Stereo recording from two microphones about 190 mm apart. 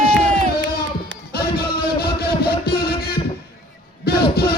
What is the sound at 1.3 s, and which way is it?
Music, 55° left (ahead or behind).